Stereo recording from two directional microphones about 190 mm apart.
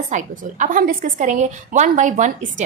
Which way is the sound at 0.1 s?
40° right (ahead or behind).